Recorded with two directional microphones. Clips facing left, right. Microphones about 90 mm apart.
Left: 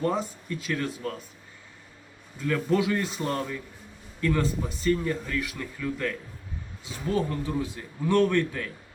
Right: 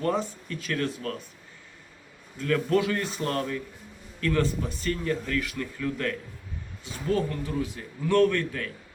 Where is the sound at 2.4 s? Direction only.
10° left (ahead or behind).